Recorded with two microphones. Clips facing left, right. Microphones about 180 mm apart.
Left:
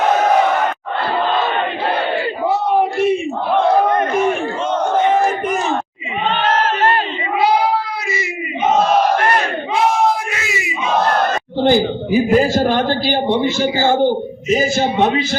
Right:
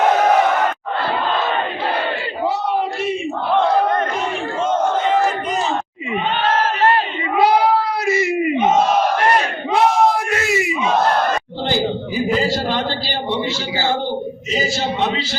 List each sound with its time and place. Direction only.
2.5 s battle cry: 50° left (ahead or behind)
8.0 s crowd: 60° right (ahead or behind)
11.7 s a man's voice: 50° left (ahead or behind)